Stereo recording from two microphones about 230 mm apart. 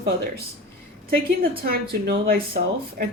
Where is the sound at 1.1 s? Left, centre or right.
Right.